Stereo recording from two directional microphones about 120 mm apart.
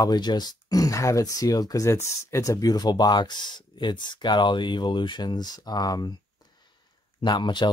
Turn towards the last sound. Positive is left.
turn(degrees=40)  # may be behind; listen again after turning